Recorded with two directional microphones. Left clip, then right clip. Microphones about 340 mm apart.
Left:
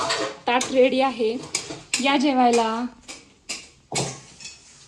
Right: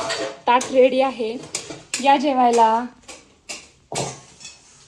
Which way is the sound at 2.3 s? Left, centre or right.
Centre.